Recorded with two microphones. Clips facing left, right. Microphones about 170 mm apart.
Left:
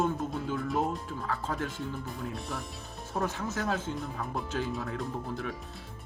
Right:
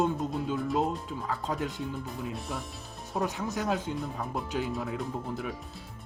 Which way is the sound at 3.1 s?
15° right (ahead or behind).